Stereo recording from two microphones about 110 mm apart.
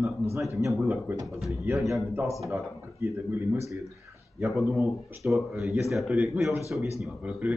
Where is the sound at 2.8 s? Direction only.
20° right (ahead or behind).